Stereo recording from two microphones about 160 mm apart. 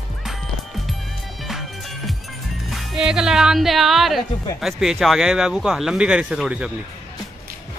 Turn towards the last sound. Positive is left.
turn(degrees=-5)  # may be behind; listen again after turning